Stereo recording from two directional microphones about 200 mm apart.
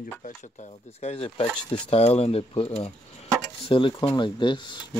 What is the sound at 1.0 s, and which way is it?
Speech, 30° left (ahead or behind).